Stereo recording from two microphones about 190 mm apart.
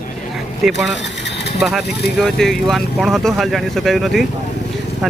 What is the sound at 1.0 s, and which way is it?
Vehicle, 65° left (ahead or behind).